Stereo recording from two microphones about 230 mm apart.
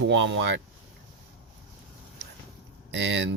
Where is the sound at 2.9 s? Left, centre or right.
Right.